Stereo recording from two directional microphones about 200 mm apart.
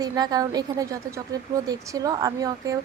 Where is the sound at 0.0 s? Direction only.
20° right (ahead or behind).